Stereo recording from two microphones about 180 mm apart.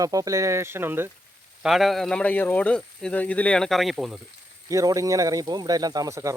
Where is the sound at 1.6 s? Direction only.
Centre (ahead or behind).